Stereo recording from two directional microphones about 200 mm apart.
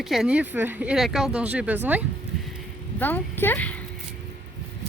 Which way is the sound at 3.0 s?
10° left (ahead or behind).